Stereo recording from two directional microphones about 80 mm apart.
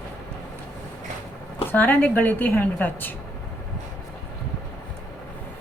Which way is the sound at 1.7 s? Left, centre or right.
Left.